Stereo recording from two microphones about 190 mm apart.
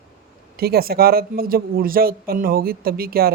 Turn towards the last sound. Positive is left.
turn(degrees=-55)  # may be behind; listen again after turning